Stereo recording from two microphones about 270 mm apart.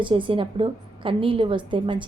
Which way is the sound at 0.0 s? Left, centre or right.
Centre.